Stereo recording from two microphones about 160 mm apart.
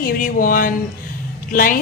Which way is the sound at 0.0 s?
60° left (ahead or behind).